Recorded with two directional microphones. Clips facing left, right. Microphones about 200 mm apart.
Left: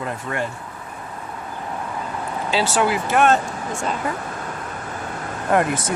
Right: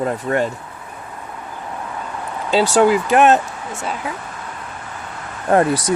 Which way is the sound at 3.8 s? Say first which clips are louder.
Left 1 dB; 5° right (ahead or behind).